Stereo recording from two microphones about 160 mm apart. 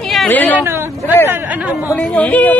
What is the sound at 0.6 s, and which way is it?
A woman's voice, 15° right (ahead or behind).